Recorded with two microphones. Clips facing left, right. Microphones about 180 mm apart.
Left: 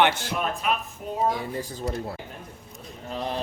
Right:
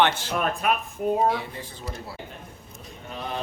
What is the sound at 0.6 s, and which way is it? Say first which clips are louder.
Speech: right 4 dB; 55° right (ahead or behind).